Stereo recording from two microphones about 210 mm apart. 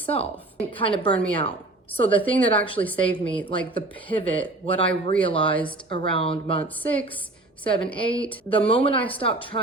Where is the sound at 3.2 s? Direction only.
5° left (ahead or behind).